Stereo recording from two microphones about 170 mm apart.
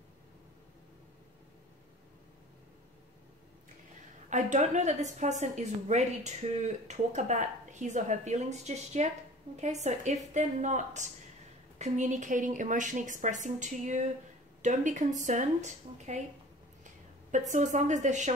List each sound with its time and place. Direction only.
4.3 s a woman's voice: 45° right (ahead or behind)
17.3 s a woman's voice: 45° right (ahead or behind)